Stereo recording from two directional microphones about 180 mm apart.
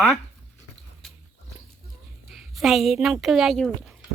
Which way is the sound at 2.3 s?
Centre (ahead or behind).